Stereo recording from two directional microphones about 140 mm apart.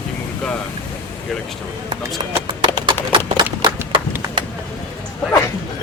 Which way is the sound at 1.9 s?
30° right (ahead or behind).